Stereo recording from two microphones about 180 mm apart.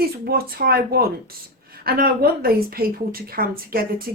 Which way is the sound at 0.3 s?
60° right (ahead or behind).